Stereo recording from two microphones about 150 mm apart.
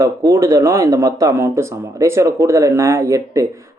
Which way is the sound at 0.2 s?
20° right (ahead or behind).